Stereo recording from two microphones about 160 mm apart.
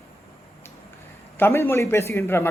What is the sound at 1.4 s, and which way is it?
A man's voice, 10° left (ahead or behind).